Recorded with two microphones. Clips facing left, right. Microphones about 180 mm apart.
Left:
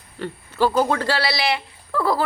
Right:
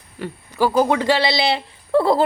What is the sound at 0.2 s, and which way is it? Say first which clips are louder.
A woman's voice: right 1 dB; 15° right (ahead or behind).